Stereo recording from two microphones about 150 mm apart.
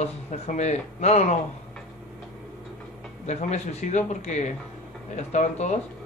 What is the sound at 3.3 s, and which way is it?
Speech, 50° left (ahead or behind).